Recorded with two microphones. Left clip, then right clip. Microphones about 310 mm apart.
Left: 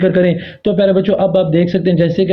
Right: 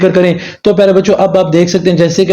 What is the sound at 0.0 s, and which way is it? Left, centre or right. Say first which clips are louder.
Speech: right 4 dB; right.